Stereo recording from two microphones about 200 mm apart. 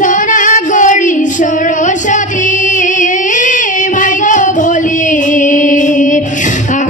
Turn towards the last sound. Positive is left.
turn(degrees=40)  # may be behind; listen again after turning